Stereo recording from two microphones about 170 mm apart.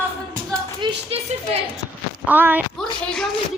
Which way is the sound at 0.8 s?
35° right (ahead or behind).